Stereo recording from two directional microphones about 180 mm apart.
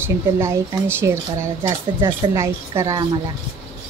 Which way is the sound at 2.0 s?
25° right (ahead or behind).